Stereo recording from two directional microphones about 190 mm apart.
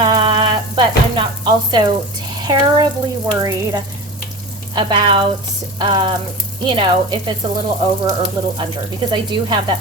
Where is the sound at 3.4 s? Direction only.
15° right (ahead or behind).